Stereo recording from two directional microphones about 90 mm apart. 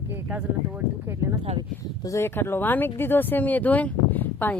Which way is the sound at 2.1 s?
30° left (ahead or behind).